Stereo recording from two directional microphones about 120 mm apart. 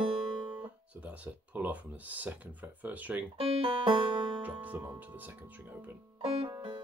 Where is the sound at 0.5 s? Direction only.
15° right (ahead or behind).